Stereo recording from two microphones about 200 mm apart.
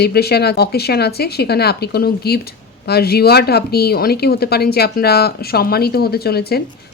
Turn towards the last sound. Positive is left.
turn(degrees=50)  # may be behind; listen again after turning